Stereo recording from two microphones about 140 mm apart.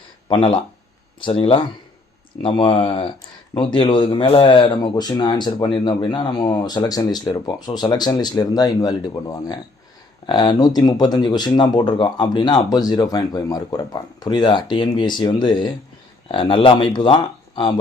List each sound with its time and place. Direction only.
0.3 s speech: 40° left (ahead or behind)